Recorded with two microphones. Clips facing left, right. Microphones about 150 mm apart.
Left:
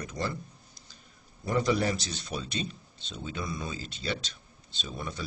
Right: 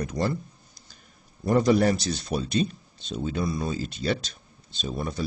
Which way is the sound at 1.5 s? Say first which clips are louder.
Right 7 dB; 45° right (ahead or behind).